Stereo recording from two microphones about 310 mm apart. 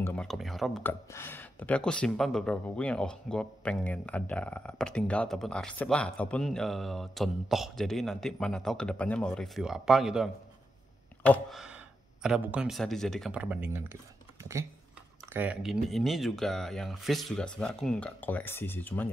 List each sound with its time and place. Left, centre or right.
0.0 s speech: centre